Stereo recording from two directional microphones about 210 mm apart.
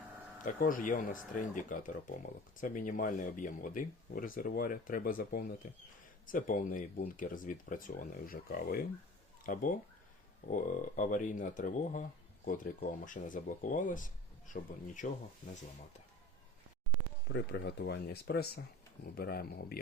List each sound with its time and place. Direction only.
0.4 s speech: 40° left (ahead or behind)
17.2 s speech: 55° left (ahead or behind)